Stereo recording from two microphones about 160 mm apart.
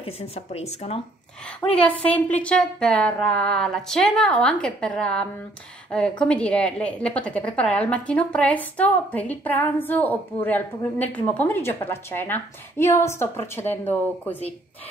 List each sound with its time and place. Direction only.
0.0 s speech: 40° left (ahead or behind)
1.7 s a woman's voice: 10° left (ahead or behind)